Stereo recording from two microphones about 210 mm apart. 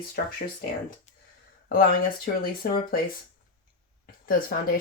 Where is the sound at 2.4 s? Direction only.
45° left (ahead or behind).